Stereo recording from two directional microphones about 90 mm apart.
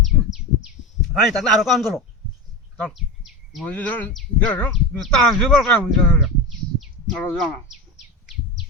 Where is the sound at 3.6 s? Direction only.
15° left (ahead or behind).